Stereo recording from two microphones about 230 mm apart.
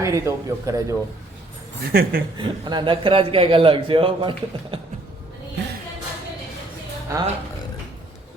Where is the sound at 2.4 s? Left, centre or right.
Centre.